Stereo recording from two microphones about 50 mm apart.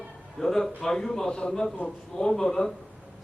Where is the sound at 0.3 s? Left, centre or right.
Centre.